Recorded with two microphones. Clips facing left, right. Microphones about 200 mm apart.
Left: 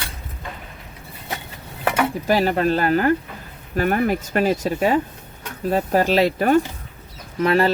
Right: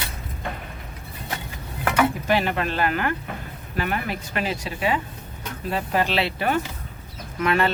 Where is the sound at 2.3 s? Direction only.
40° left (ahead or behind).